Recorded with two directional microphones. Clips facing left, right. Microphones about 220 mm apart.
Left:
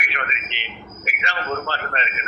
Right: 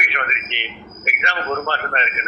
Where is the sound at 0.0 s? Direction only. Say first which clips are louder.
Right 3 dB; 60° right (ahead or behind).